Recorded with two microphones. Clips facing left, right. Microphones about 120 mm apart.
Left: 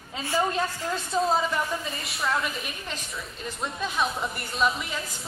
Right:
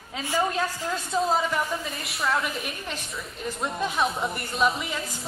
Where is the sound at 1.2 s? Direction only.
Centre (ahead or behind).